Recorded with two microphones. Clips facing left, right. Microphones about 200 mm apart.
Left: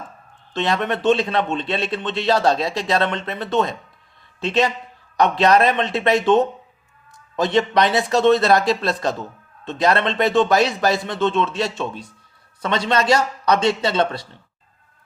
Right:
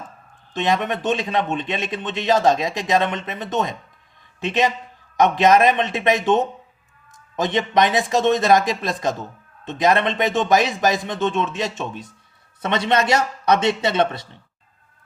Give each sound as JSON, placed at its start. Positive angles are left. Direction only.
{"t": 0.5, "sound": "a man's voice", "side_deg": -15}